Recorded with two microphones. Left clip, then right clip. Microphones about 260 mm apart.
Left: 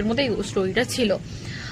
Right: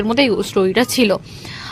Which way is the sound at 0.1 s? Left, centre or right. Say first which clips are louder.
Right 9 dB; right.